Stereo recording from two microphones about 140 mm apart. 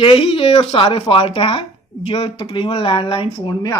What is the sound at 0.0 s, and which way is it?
A man's voice, 40° left (ahead or behind).